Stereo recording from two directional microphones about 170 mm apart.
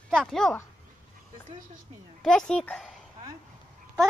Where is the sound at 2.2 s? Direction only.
5° left (ahead or behind).